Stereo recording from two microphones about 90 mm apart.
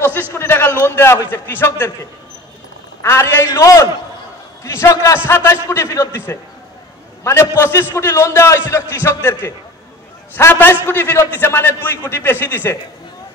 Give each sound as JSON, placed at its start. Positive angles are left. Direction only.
{"t": 0.3, "sound": "a sound", "side_deg": 25}
{"t": 0.8, "sound": "a man's voice", "side_deg": 30}
{"t": 3.0, "sound": "a man's voice", "side_deg": 30}